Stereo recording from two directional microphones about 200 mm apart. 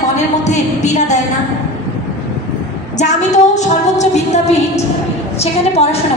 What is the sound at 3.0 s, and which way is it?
A woman's voice, 35° left (ahead or behind).